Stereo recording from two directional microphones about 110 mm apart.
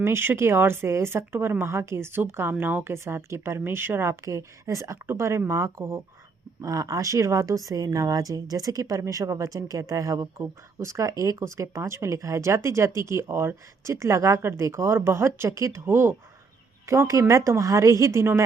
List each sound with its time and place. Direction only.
0.0 s a woman's voice: 20° right (ahead or behind)